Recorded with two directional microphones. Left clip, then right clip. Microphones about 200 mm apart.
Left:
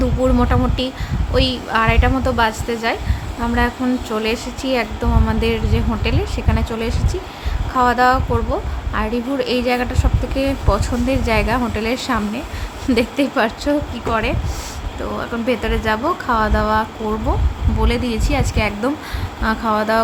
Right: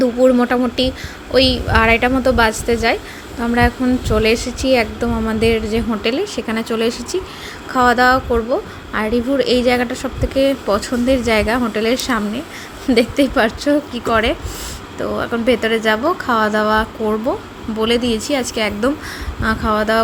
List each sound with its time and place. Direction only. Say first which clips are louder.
0.0 s a woman's voice: right 5 dB; 15° right (ahead or behind)